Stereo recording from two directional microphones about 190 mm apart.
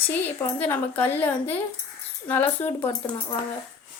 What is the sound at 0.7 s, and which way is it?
A woman's voice, 10° left (ahead or behind).